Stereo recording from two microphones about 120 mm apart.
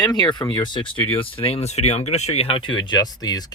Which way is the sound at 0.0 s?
40° left (ahead or behind).